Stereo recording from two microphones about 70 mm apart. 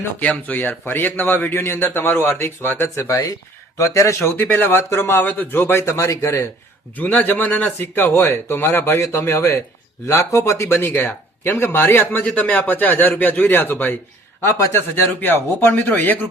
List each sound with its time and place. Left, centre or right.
0.2 s a man's voice: left
4.4 s speech: left
4.7 s a man's voice: left
5.2 s speech: left
5.9 s speech: left
6.9 s a man's voice: left
15.2 s speech: left